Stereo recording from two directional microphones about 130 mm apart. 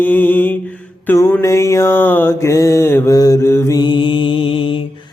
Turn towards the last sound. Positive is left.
turn(degrees=40)  # may be behind; listen again after turning